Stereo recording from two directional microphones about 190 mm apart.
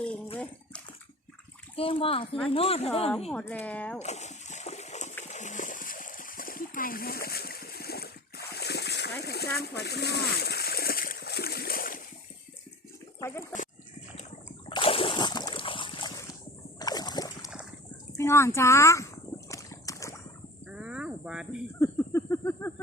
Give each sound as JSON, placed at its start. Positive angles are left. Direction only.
{"t": 1.7, "sound": "a child's voice", "side_deg": 30}
{"t": 3.3, "sound": "speech", "side_deg": 10}
{"t": 4.0, "sound": "splash", "side_deg": 35}
{"t": 9.2, "sound": "speech", "side_deg": 60}
{"t": 9.6, "sound": "splash", "side_deg": 60}
{"t": 13.1, "sound": "a sound", "side_deg": 15}
{"t": 14.7, "sound": "splash", "side_deg": 25}
{"t": 18.2, "sound": "speech", "side_deg": 15}
{"t": 19.5, "sound": "a sound", "side_deg": 15}
{"t": 20.7, "sound": "cricket", "side_deg": -5}
{"t": 21.8, "sound": "a sound", "side_deg": 15}